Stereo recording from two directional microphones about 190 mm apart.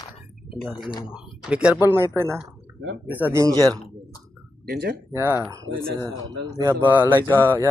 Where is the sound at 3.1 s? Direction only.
10° right (ahead or behind).